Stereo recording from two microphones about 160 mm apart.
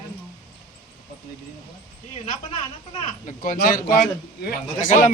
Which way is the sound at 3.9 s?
75° left (ahead or behind).